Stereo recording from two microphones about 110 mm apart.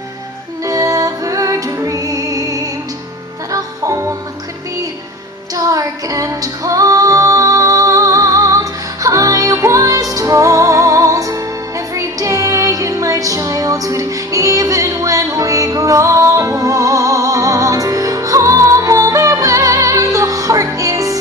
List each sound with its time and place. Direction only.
0.7 s music: 30° right (ahead or behind)
5.6 s female singing: 30° right (ahead or behind)
11.9 s music: 30° right (ahead or behind)